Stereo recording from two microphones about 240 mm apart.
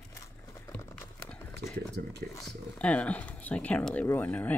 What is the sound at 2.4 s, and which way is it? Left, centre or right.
Speech, centre.